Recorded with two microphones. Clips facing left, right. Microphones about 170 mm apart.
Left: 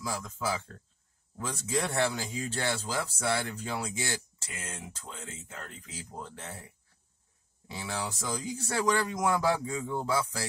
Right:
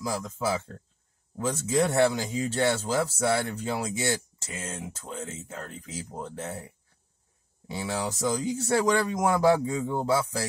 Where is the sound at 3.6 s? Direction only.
25° right (ahead or behind).